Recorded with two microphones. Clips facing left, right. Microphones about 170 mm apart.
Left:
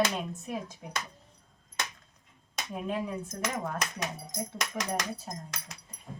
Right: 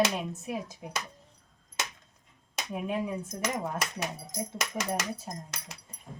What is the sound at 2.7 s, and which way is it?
Speech, 10° right (ahead or behind).